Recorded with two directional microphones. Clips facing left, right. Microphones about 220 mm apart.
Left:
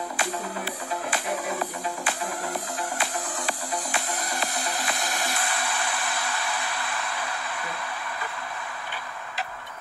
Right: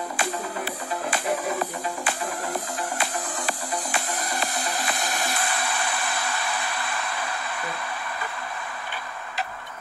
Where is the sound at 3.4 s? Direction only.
45° right (ahead or behind).